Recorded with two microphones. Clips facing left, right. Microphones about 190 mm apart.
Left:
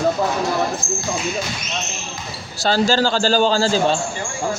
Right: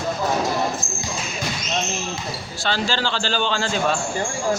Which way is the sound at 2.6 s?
40° left (ahead or behind).